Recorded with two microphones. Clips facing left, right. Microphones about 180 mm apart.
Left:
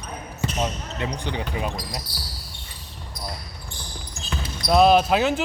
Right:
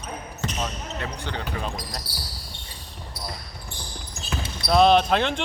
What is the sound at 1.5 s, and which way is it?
Speech, 10° left (ahead or behind).